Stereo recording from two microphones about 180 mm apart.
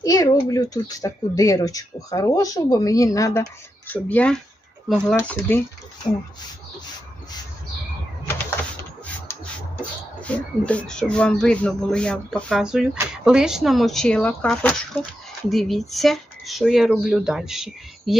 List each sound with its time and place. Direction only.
0.0 s speech: 20° left (ahead or behind)
10.3 s speech: 5° left (ahead or behind)